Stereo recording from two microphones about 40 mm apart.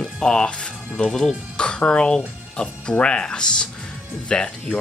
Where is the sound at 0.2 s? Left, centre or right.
Left.